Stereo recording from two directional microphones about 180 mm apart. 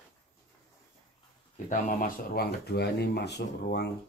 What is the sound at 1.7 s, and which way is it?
Speech, 55° left (ahead or behind).